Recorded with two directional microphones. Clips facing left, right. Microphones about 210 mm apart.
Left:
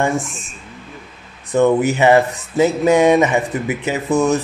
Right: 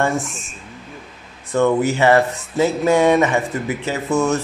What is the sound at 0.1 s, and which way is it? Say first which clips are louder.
Speech: left 2 dB; centre (ahead or behind).